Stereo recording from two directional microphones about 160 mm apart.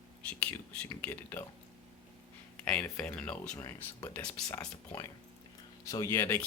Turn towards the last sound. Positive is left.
turn(degrees=15)  # may be behind; listen again after turning